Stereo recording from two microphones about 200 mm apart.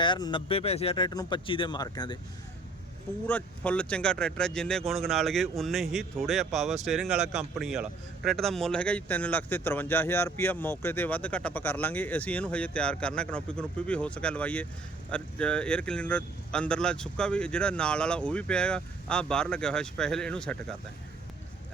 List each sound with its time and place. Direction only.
0.0 s speech: 25° left (ahead or behind)
3.2 s a man's voice: 5° left (ahead or behind)